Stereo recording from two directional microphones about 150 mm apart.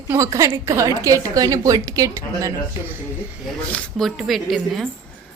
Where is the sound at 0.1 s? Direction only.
20° right (ahead or behind).